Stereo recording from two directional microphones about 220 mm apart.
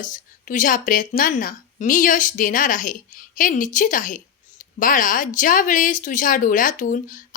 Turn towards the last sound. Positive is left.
turn(degrees=35)  # may be behind; listen again after turning